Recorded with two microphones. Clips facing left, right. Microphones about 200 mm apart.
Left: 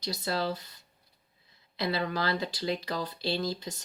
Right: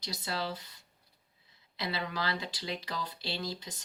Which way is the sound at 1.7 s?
45° left (ahead or behind).